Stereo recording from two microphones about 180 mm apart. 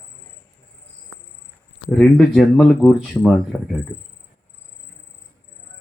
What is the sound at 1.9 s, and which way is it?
Speech, 5° left (ahead or behind).